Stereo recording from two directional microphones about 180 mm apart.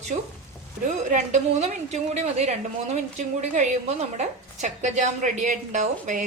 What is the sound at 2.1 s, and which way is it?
A woman's voice, 40° right (ahead or behind).